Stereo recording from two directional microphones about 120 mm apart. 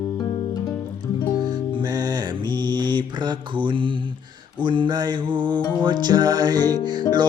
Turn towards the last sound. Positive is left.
turn(degrees=-35)  # may be behind; listen again after turning